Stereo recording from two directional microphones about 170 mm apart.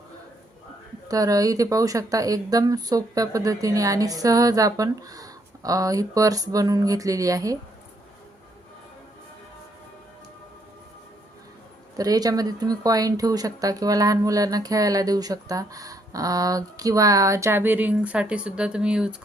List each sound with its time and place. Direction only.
1.0 s speech: 20° right (ahead or behind)
11.9 s speech: 20° right (ahead or behind); by 19.1 s 5° right (ahead or behind)